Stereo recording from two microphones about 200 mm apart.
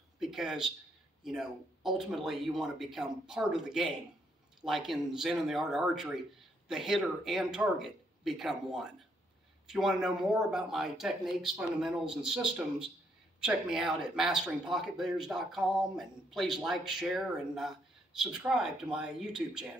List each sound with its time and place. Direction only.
0.2 s speech: centre (ahead or behind)